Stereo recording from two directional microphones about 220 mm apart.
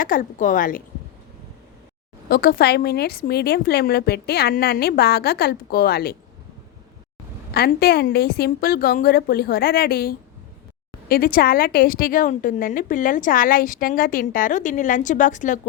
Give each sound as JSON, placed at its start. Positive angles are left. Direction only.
{"t": 0.0, "sound": "a woman's voice", "side_deg": 40}
{"t": 2.3, "sound": "a woman's voice", "side_deg": 45}
{"t": 7.5, "sound": "a woman's voice", "side_deg": 45}